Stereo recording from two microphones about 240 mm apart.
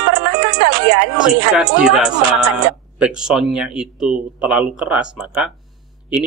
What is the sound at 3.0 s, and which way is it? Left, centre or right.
A man's voice, centre.